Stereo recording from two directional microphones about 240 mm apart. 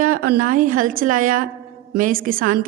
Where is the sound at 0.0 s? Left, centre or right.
Right.